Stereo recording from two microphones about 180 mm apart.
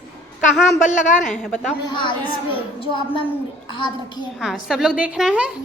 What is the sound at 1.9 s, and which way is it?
Speech, 25° left (ahead or behind).